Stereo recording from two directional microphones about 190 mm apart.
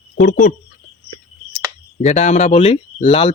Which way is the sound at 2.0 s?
35° left (ahead or behind).